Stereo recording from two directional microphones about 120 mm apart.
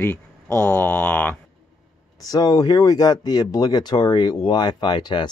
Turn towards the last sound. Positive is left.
turn(degrees=40)  # may be behind; listen again after turning